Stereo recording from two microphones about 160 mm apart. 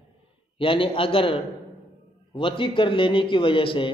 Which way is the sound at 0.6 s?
35° left (ahead or behind).